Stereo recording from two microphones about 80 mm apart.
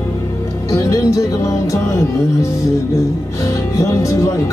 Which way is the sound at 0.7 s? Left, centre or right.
Left.